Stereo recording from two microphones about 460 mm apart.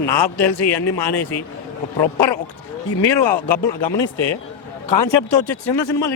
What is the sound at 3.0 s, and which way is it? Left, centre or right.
Speech, left.